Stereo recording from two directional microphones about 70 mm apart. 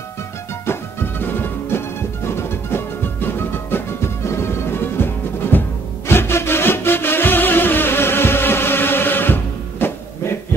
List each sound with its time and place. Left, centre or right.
0.7 s music: left